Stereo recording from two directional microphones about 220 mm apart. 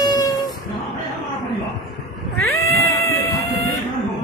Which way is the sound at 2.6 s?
15° left (ahead or behind).